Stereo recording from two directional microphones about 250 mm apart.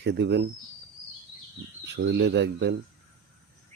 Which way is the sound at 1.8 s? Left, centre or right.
Right.